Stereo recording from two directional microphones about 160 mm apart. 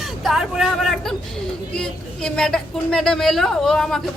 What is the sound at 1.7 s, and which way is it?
A woman's voice, 5° left (ahead or behind).